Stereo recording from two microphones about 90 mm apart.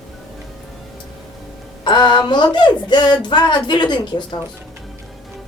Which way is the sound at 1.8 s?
55° left (ahead or behind).